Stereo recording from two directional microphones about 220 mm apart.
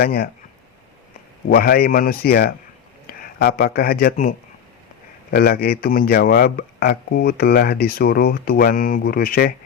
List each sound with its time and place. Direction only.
0.0 s speech: 45° left (ahead or behind)
1.5 s speech: 45° left (ahead or behind)